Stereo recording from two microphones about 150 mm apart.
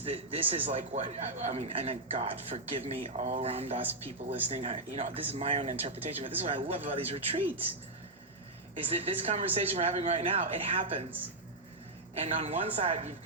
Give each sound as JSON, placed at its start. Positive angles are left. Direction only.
{"t": 0.0, "sound": "a man's voice", "side_deg": -40}
{"t": 8.7, "sound": "speech", "side_deg": -40}
{"t": 12.1, "sound": "a man's voice", "side_deg": -45}